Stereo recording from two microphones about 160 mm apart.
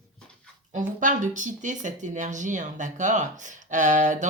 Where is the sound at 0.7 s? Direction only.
55° right (ahead or behind).